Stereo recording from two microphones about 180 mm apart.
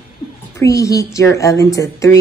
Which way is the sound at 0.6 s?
20° left (ahead or behind).